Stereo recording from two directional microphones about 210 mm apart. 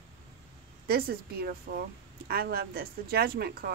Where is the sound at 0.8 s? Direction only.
45° right (ahead or behind).